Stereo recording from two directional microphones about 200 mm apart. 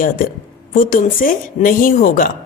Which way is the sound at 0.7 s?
45° left (ahead or behind).